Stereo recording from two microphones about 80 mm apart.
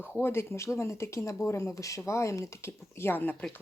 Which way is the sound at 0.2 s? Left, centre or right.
Left.